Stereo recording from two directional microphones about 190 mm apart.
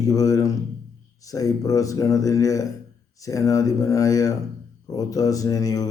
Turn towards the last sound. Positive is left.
turn(degrees=20)  # may be behind; listen again after turning